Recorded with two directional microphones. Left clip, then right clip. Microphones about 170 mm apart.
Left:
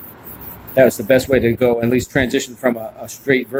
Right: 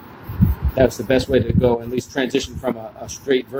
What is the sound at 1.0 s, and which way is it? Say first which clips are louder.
Speech: left 4 dB; 45° left (ahead or behind).